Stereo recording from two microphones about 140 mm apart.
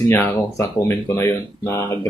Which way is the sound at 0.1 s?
20° left (ahead or behind).